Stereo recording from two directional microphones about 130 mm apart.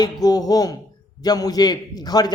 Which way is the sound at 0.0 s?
30° left (ahead or behind).